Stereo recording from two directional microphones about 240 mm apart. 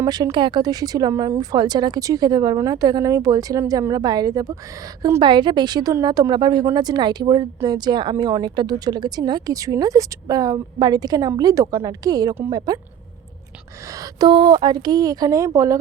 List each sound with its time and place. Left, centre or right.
0.0 s speech: centre
13.8 s speech: centre